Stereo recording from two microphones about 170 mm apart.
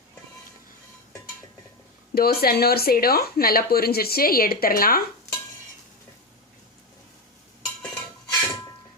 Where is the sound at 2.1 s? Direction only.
65° left (ahead or behind).